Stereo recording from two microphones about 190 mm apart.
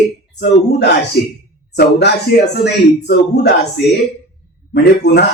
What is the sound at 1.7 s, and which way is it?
Speech, 60° left (ahead or behind).